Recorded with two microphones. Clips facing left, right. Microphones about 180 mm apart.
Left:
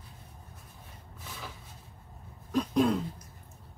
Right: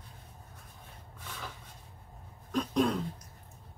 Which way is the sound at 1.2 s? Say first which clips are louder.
Even; 5° left (ahead or behind).